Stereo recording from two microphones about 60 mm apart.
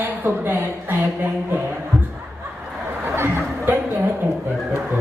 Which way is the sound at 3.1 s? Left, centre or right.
Right.